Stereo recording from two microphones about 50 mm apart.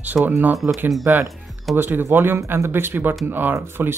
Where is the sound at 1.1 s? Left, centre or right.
Right.